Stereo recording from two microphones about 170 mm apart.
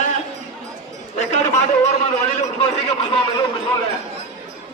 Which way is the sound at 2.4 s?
40° left (ahead or behind).